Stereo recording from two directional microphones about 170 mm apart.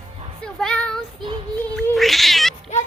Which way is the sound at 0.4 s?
5° left (ahead or behind).